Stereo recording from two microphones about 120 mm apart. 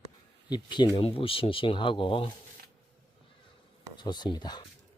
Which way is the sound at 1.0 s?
50° left (ahead or behind).